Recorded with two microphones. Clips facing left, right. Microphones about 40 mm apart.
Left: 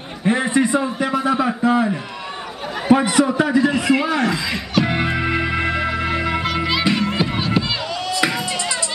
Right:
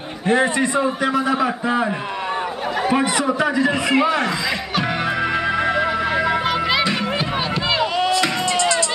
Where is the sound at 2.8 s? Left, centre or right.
Centre.